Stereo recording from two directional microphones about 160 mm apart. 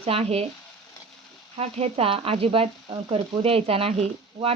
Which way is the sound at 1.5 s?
40° right (ahead or behind).